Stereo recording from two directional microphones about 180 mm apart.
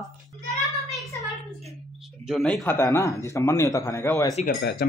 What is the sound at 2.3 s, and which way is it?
Speech, centre (ahead or behind).